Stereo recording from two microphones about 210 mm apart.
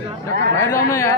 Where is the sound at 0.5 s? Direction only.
10° left (ahead or behind).